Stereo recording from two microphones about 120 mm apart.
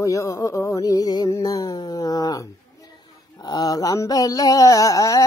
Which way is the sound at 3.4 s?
30° left (ahead or behind).